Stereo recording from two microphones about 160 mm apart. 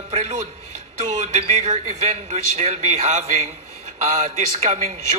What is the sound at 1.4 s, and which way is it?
A man's voice, 45° right (ahead or behind).